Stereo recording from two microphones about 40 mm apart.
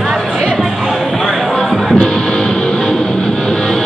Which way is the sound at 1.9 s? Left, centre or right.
Centre.